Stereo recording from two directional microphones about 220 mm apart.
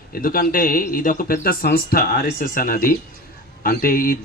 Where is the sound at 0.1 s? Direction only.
40° left (ahead or behind).